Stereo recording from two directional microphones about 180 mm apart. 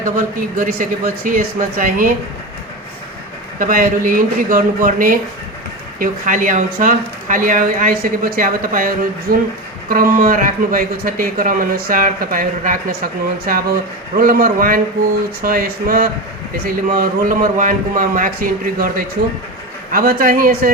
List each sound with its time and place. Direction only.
0.0 s speech: 50° right (ahead or behind)
3.6 s speech: 50° right (ahead or behind)
14.2 s speech: 55° right (ahead or behind)